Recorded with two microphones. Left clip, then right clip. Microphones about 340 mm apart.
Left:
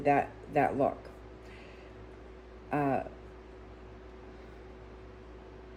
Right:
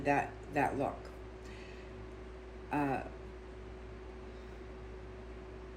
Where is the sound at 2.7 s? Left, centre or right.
Left.